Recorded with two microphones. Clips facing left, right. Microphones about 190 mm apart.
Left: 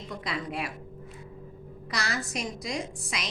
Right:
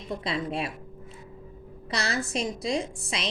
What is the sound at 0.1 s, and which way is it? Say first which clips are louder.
Speech: right 5 dB; 25° right (ahead or behind).